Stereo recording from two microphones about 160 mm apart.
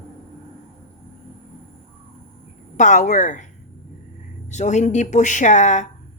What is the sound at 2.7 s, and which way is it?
Speech, 50° left (ahead or behind).